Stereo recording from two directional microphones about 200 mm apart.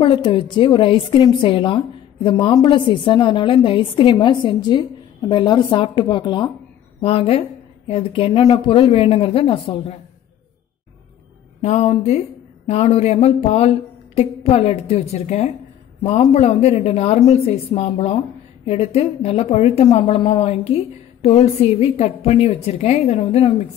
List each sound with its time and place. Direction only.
0.0 s a woman's voice: 25° left (ahead or behind)
11.6 s a woman's voice: 30° left (ahead or behind)